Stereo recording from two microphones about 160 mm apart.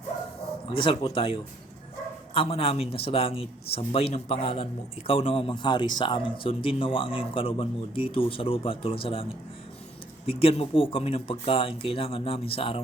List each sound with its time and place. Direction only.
0.7 s a man's voice: 35° left (ahead or behind)
10.2 s a man's voice: 35° left (ahead or behind)